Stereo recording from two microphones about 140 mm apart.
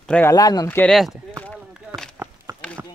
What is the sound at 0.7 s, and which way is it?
Speech, 10° left (ahead or behind).